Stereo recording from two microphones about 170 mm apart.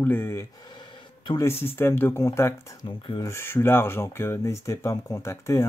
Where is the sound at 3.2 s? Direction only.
15° left (ahead or behind).